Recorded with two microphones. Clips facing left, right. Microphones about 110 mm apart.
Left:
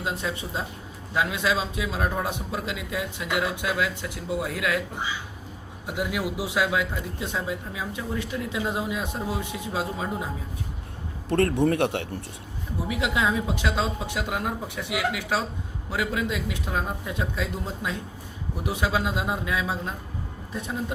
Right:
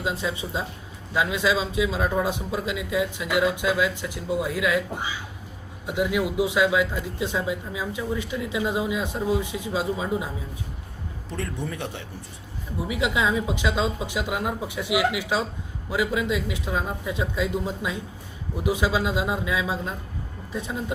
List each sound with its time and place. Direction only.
0.0 s a man's voice: centre (ahead or behind)
5.8 s a man's voice: centre (ahead or behind)
11.3 s speech: 65° left (ahead or behind)
12.9 s a man's voice: centre (ahead or behind)